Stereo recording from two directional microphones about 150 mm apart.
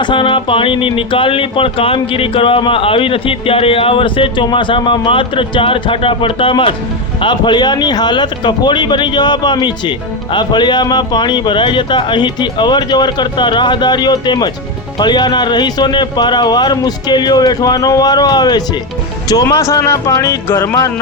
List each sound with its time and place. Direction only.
0.0 s speech: 35° left (ahead or behind); by 20.9 s 15° left (ahead or behind)